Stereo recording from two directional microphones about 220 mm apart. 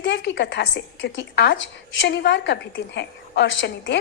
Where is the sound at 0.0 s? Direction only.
50° left (ahead or behind).